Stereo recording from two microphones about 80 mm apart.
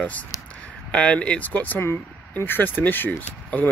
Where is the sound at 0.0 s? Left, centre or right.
Centre.